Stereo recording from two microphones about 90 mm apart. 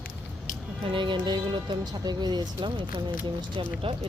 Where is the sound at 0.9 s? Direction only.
65° right (ahead or behind).